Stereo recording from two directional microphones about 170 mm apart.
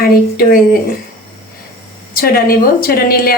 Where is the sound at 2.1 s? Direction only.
60° left (ahead or behind).